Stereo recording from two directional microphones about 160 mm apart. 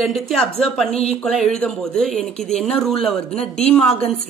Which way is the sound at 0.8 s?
40° left (ahead or behind).